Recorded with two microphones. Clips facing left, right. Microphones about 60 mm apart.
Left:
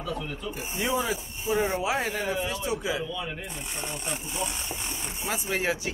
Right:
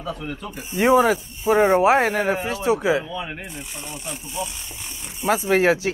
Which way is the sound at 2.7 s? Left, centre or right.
Right.